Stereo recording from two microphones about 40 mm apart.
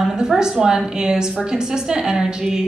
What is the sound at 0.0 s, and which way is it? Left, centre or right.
A woman's voice, centre.